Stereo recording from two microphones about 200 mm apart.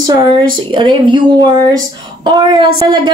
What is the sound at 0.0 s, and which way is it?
Speech, 20° right (ahead or behind).